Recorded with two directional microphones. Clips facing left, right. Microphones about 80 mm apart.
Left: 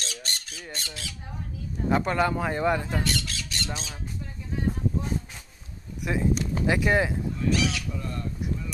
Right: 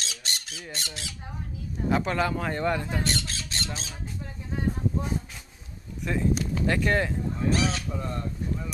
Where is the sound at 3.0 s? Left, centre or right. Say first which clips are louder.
Even; right.